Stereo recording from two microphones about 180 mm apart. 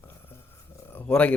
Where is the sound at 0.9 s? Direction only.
10° left (ahead or behind).